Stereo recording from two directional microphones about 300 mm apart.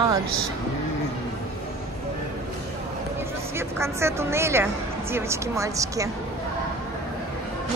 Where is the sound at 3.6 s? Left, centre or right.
Centre.